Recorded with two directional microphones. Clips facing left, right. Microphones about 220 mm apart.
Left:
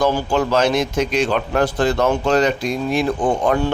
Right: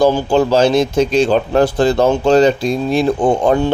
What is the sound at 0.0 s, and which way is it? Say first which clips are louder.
Speech: right 5 dB; 25° right (ahead or behind).